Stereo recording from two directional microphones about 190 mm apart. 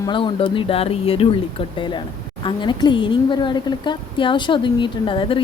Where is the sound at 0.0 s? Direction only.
25° left (ahead or behind).